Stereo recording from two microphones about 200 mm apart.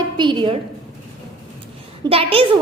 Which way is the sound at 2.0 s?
30° right (ahead or behind).